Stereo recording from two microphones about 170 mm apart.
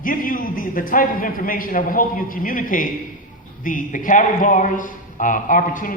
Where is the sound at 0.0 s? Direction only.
55° left (ahead or behind).